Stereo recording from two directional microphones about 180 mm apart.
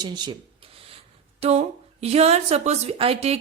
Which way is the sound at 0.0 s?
25° right (ahead or behind).